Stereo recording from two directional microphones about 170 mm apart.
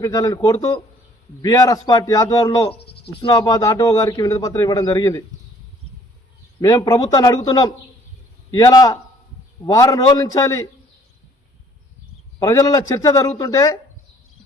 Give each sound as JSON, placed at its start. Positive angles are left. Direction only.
{"t": 0.0, "sound": "speech", "side_deg": 20}
{"t": 6.6, "sound": "speech", "side_deg": 20}
{"t": 12.4, "sound": "speech", "side_deg": 20}